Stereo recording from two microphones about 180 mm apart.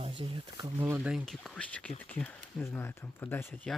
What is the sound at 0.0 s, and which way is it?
Speech, 30° right (ahead or behind).